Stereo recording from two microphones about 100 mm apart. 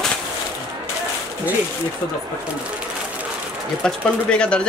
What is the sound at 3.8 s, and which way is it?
Speech, 10° left (ahead or behind).